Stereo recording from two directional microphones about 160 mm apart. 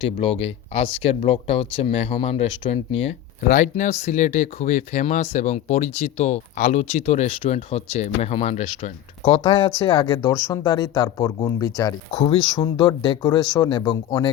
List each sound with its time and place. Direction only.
0.0 s speech: 35° left (ahead or behind)